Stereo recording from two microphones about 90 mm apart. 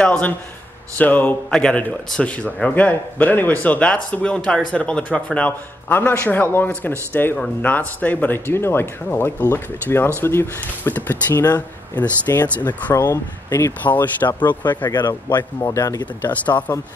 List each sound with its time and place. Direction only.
0.0 s a man's voice: 15° left (ahead or behind)
12.9 s speech: 35° left (ahead or behind)
13.8 s speech: 20° left (ahead or behind)
14.9 s speech: 50° left (ahead or behind)
15.6 s speech: 35° left (ahead or behind)
16.4 s a man's voice: 15° left (ahead or behind)